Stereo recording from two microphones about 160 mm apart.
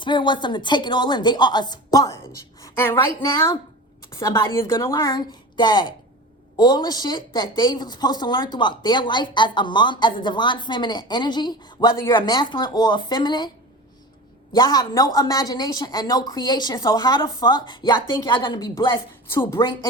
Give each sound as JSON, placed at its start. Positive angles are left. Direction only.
{"t": 0.0, "sound": "speech", "side_deg": 30}
{"t": 3.2, "sound": "speech", "side_deg": 30}
{"t": 4.1, "sound": "speech", "side_deg": 20}
{"t": 14.5, "sound": "speech", "side_deg": 25}
{"t": 19.3, "sound": "a woman's voice", "side_deg": 15}